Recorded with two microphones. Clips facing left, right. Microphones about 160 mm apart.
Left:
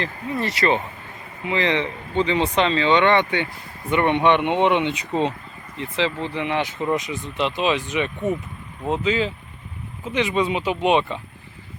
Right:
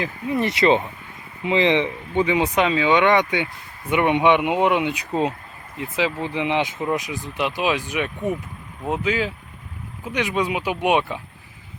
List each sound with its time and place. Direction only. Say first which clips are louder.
0.0 s speech: right 3 dB; 20° right (ahead or behind)
6.7 s speech: left 1 dB; 5° right (ahead or behind)